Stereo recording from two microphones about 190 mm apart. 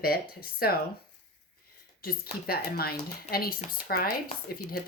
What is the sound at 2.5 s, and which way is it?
Speech, 55° left (ahead or behind).